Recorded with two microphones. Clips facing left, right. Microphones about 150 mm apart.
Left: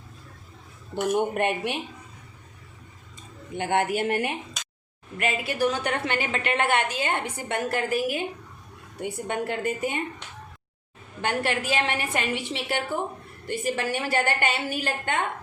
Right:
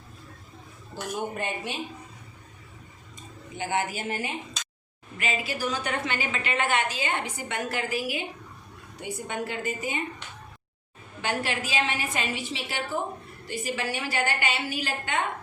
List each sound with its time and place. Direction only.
1.3 s a woman's voice: 65° left (ahead or behind)
3.5 s a woman's voice: 60° left (ahead or behind)
11.2 s a woman's voice: 55° left (ahead or behind)